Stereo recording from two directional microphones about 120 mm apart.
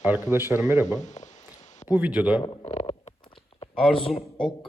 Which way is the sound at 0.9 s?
90° left.